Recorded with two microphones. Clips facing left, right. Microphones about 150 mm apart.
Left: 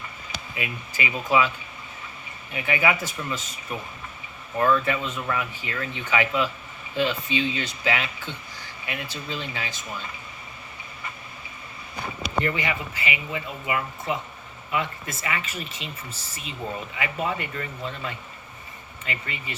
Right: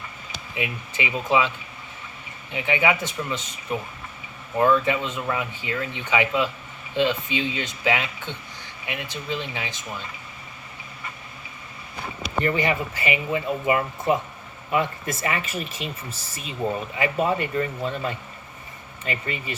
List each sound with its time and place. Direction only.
0.5 s speech: 20° right (ahead or behind)
12.6 s speech: 40° right (ahead or behind)
16.9 s speech: 35° right (ahead or behind)